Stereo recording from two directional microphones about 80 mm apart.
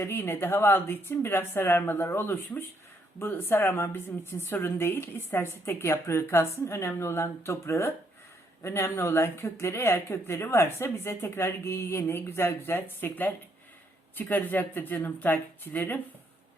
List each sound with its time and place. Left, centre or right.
0.0 s a woman's voice: left